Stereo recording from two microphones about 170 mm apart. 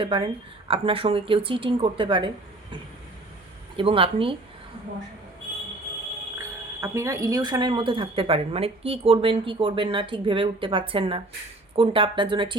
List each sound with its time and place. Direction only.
0.0 s a woman's voice: 30° right (ahead or behind)
3.8 s a woman's voice: 30° right (ahead or behind)
6.8 s a woman's voice: 15° right (ahead or behind)